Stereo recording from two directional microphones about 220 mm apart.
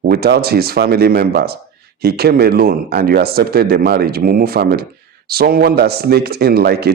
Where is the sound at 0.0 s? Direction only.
45° right (ahead or behind).